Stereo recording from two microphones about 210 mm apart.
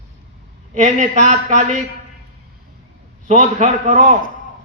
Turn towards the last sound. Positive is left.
turn(degrees=-35)  # may be behind; listen again after turning